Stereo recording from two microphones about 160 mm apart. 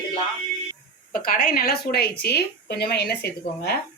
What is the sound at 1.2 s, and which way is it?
Speech, 65° left (ahead or behind).